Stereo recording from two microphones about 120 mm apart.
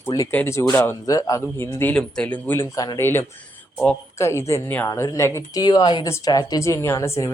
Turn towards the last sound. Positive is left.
turn(degrees=25)  # may be behind; listen again after turning